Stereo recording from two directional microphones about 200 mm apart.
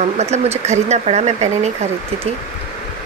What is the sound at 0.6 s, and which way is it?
Speech, 35° right (ahead or behind).